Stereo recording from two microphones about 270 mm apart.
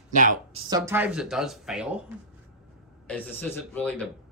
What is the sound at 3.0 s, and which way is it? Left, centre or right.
Speech, centre.